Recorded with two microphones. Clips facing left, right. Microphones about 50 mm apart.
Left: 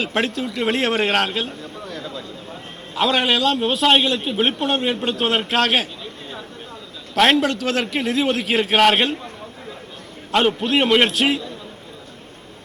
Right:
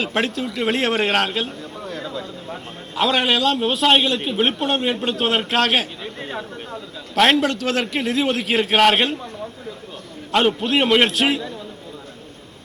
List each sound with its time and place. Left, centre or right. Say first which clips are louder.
0.0 s a man's voice: even; centre
1.8 s a sound: right 3 dB; right
2.9 s a man's voice: even; centre
6.0 s chatter: right 4 dB; right
7.1 s a man's voice: even; centre
10.3 s a man's voice: even; centre